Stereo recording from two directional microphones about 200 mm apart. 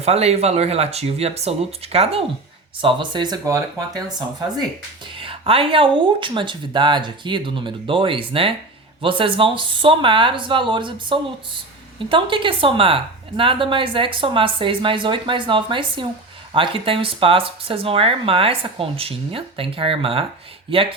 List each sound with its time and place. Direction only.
0.0 s a woman's voice: 30° right (ahead or behind)